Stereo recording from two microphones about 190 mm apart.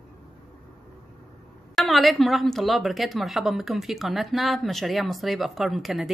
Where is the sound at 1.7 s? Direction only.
Centre (ahead or behind).